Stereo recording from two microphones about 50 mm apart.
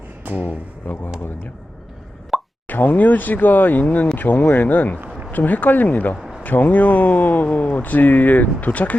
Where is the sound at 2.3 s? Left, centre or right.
Centre.